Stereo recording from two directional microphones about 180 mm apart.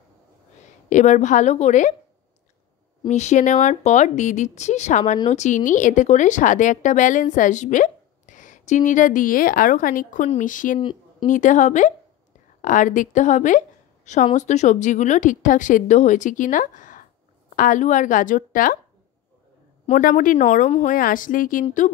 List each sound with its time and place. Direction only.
0.8 s a woman's voice: 45° left (ahead or behind)
3.1 s a woman's voice: 40° left (ahead or behind)
10.8 s a sound: 25° left (ahead or behind)
11.2 s a woman's voice: 45° left (ahead or behind)
19.9 s a woman's voice: 50° left (ahead or behind)